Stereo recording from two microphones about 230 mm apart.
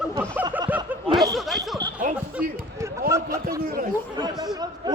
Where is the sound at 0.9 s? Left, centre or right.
Centre.